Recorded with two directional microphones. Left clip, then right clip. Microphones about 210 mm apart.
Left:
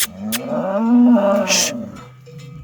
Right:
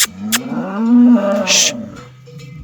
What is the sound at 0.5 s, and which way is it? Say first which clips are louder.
Cattle: left 1 dB; 35° left (ahead or behind).